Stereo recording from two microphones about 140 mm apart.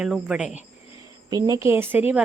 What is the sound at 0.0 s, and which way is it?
Speech, 5° right (ahead or behind).